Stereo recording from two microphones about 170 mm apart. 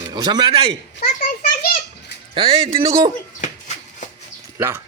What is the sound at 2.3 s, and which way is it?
Speech, 30° right (ahead or behind).